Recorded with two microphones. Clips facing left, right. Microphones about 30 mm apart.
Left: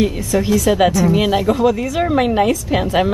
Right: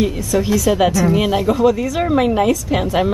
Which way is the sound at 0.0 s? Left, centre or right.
Centre.